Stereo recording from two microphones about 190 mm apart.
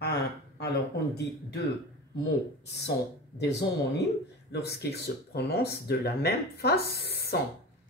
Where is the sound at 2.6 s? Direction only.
60° left (ahead or behind).